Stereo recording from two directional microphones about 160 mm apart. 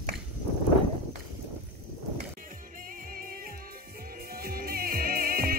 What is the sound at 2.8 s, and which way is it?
Music, 60° right (ahead or behind).